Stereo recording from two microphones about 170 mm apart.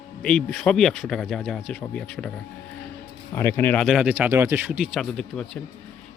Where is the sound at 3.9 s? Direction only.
10° right (ahead or behind).